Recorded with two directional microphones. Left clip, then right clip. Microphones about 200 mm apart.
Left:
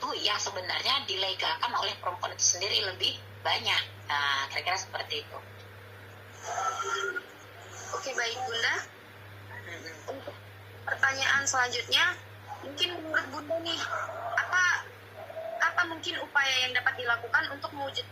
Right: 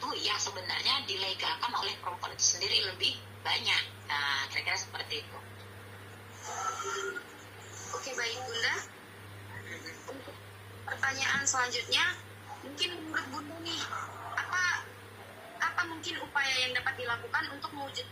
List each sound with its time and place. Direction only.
0.0 s a woman's voice: 20° left (ahead or behind)
6.4 s a woman's voice: 20° left (ahead or behind)
10.8 s a woman's voice: 20° left (ahead or behind)
15.5 s a sound: 20° left (ahead or behind)
16.1 s a woman's voice: 20° left (ahead or behind)